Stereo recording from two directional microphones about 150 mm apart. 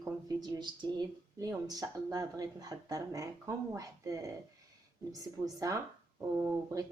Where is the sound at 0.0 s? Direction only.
25° right (ahead or behind).